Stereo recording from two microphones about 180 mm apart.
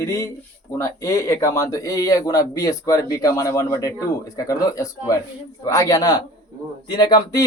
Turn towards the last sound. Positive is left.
turn(degrees=25)  # may be behind; listen again after turning